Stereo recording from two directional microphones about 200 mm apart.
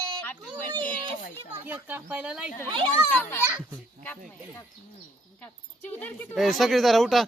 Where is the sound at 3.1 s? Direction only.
10° left (ahead or behind).